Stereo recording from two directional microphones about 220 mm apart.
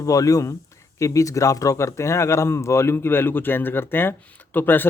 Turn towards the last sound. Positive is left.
turn(degrees=10)  # may be behind; listen again after turning